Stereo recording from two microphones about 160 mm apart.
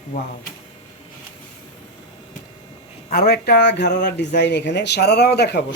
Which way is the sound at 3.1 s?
75° left (ahead or behind).